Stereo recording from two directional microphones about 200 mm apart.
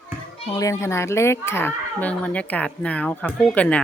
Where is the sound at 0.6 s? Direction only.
15° left (ahead or behind).